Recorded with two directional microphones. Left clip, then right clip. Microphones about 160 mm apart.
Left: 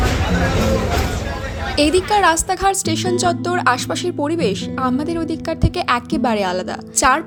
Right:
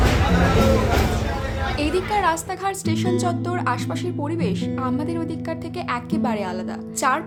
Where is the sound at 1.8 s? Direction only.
35° left (ahead or behind).